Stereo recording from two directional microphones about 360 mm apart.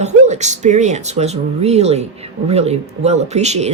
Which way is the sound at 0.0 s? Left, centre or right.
Centre.